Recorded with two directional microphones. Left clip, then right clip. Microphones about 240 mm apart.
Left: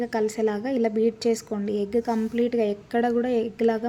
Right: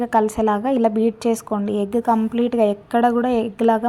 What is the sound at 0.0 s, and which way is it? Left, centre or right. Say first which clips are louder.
A woman's voice: right 6 dB; centre.